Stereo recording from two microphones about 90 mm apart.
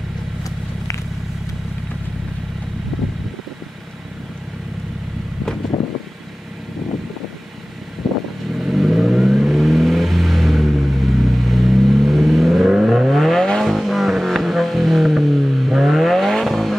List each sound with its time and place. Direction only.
0.4 s vehicle: 35° left (ahead or behind)
8.0 s vehicle: centre (ahead or behind)